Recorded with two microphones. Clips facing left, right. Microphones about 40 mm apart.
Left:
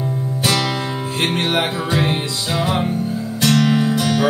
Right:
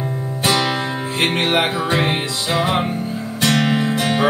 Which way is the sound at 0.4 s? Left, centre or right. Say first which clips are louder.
Right 2 dB; right.